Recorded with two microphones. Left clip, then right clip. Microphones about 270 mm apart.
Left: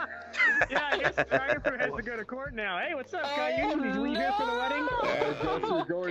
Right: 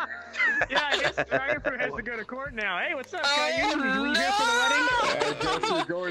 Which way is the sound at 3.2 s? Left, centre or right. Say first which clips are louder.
Right 5 dB; right.